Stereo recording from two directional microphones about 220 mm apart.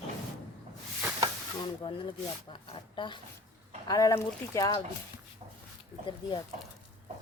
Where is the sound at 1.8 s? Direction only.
20° left (ahead or behind).